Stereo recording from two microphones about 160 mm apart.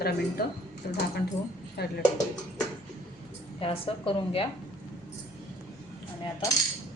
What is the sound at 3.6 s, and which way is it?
Speech, 35° left (ahead or behind).